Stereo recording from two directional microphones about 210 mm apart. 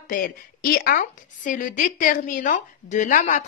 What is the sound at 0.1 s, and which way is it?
A woman's voice, 40° left (ahead or behind).